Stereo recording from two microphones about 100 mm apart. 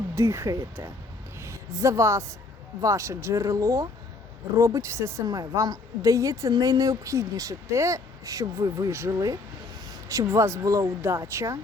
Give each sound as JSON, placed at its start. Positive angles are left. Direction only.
{"t": 0.2, "sound": "speech", "side_deg": -30}
{"t": 1.4, "sound": "a sound", "side_deg": -30}
{"t": 2.8, "sound": "speech", "side_deg": -30}
{"t": 5.2, "sound": "speech", "side_deg": -40}